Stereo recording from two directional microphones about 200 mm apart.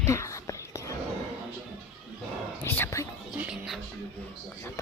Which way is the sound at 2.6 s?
10° left (ahead or behind).